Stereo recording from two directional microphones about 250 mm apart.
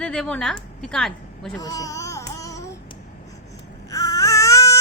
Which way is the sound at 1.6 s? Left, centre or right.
Centre.